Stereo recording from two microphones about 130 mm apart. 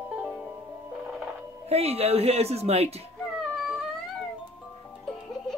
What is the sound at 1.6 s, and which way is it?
Speech, 50° right (ahead or behind).